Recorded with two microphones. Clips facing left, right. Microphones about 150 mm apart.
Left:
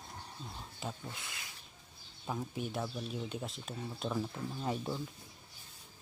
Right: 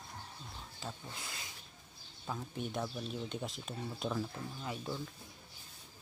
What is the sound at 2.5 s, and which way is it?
Speech, 5° left (ahead or behind).